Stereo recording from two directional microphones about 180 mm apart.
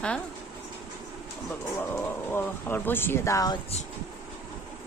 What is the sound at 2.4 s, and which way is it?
Speech, 10° left (ahead or behind).